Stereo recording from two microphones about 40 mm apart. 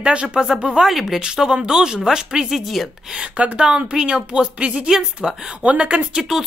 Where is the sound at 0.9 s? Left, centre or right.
Centre.